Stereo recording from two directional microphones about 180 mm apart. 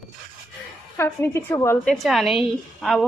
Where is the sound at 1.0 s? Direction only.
15° left (ahead or behind).